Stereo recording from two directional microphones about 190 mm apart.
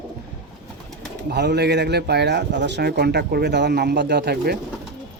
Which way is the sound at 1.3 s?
60° right (ahead or behind).